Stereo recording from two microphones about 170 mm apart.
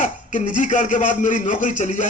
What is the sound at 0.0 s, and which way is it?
Speech, 50° left (ahead or behind).